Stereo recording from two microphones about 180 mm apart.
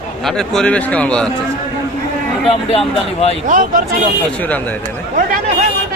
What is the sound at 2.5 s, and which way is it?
Speech, 35° left (ahead or behind).